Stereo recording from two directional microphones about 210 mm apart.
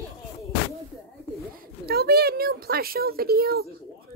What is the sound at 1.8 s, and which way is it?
Speech, 45° right (ahead or behind).